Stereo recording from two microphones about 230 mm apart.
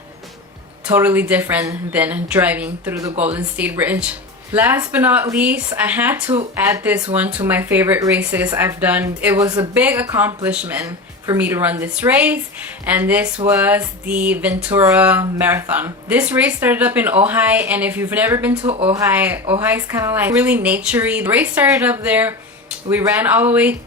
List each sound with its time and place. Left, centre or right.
0.9 s speech: centre
18.6 s speech: right
18.9 s speech: centre